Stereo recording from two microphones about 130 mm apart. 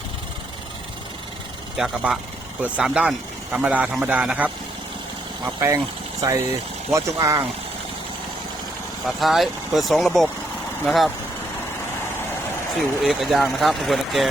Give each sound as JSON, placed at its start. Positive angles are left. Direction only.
{"t": 1.7, "sound": "a man's voice", "side_deg": -5}
{"t": 5.5, "sound": "speech", "side_deg": -25}
{"t": 6.9, "sound": "speech", "side_deg": -25}
{"t": 9.0, "sound": "speech", "side_deg": 0}
{"t": 12.7, "sound": "speech", "side_deg": 0}